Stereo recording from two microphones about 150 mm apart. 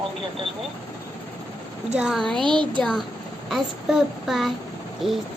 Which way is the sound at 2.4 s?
30° right (ahead or behind).